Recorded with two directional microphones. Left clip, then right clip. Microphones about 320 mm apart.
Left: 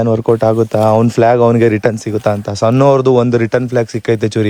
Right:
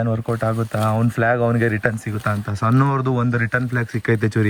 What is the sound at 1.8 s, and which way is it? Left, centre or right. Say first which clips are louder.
Speech: left 8 dB; centre.